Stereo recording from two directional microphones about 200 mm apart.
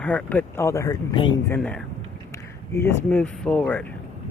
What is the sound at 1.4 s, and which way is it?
Speech, 5° left (ahead or behind).